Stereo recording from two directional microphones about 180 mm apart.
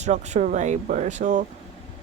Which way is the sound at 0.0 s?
40° right (ahead or behind).